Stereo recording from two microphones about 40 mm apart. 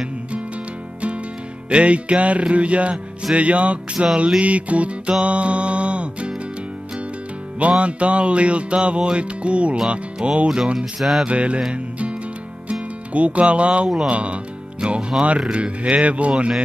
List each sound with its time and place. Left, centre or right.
1.7 s music: right
7.8 s music: right
9.1 s speech: right
11.0 s music: centre
11.2 s music: right
14.0 s speech: right
15.5 s music: right